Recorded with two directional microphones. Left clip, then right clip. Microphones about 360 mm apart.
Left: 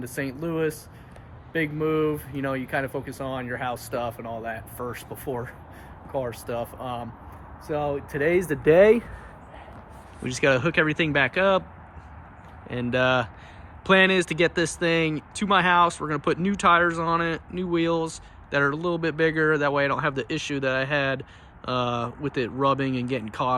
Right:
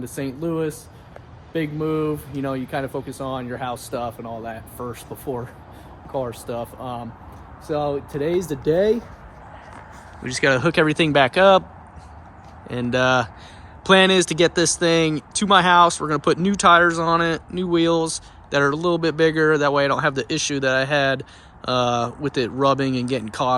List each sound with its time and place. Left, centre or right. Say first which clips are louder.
0.4 s speech: right 2 dB; centre
8.4 s speech: left 4 dB; centre
10.2 s speech: right 3 dB; centre
12.6 s speech: right 3 dB; centre